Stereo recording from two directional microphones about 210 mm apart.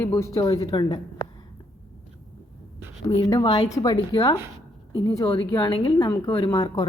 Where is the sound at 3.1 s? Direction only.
20° left (ahead or behind).